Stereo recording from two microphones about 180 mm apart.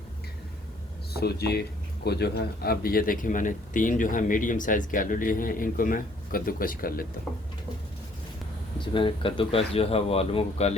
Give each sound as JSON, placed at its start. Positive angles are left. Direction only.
{"t": 1.1, "sound": "speech", "side_deg": 60}
{"t": 8.8, "sound": "speech", "side_deg": 25}